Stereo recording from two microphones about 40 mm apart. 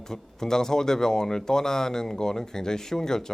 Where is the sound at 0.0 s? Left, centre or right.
Centre.